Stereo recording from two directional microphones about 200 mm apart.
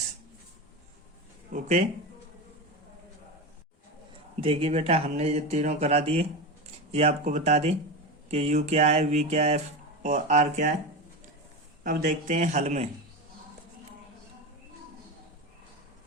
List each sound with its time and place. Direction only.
1.5 s speech: 40° right (ahead or behind)
4.4 s speech: 30° right (ahead or behind)
11.8 s speech: 45° right (ahead or behind)